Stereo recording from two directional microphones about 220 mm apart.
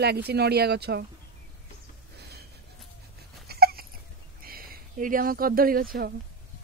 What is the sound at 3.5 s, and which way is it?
Dog, 45° right (ahead or behind).